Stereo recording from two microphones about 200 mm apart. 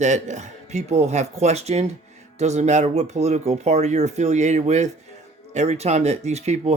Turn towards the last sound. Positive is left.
turn(degrees=-35)  # may be behind; listen again after turning